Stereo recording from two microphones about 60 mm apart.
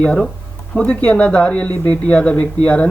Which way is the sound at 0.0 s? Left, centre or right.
Centre.